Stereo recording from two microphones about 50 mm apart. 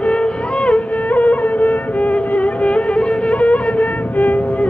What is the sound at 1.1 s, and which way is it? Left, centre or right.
Music, left.